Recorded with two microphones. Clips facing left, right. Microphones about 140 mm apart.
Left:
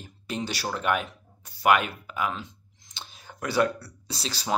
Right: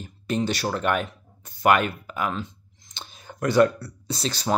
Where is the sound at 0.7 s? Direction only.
10° left (ahead or behind).